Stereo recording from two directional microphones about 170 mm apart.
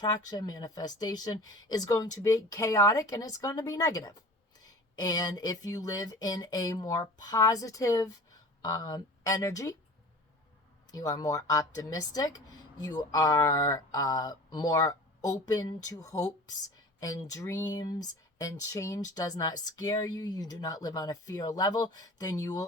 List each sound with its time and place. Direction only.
0.0 s speech: 20° left (ahead or behind)
10.9 s speech: 20° left (ahead or behind)